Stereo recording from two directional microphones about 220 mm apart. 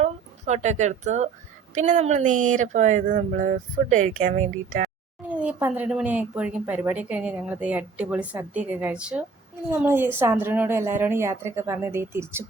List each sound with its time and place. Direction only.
0.0 s a woman's voice: 30° right (ahead or behind)
5.3 s a woman's voice: 5° right (ahead or behind)